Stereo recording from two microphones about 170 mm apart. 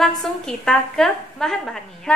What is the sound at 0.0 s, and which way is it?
A woman's voice, centre (ahead or behind).